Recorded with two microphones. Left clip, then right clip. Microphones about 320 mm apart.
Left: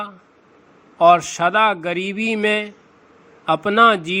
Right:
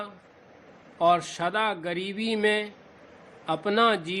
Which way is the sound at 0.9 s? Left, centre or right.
Centre.